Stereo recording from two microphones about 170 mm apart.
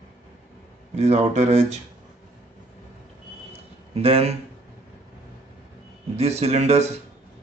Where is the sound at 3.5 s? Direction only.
35° right (ahead or behind).